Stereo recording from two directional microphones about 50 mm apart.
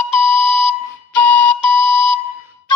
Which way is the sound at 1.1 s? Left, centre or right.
Left.